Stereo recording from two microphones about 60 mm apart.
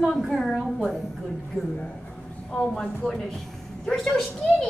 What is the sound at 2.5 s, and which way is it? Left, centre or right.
A woman's voice, centre.